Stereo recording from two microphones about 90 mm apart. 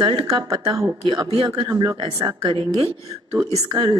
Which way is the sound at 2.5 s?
75° right (ahead or behind).